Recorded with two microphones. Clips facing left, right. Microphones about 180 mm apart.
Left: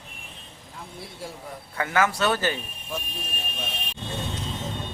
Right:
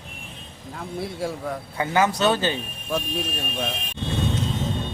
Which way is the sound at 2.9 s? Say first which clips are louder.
Right 9 dB; 90° right.